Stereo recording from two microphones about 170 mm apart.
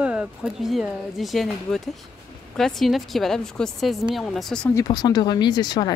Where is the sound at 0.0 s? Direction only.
5° right (ahead or behind).